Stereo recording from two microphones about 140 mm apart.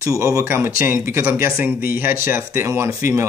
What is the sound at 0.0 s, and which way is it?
Speech, 20° right (ahead or behind).